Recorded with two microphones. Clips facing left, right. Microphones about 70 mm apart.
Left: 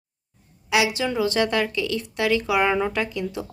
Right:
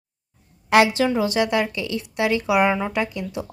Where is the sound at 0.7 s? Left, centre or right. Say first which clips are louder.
Right 6 dB; right.